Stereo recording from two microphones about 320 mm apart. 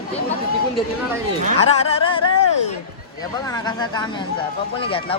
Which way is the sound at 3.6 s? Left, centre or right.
Centre.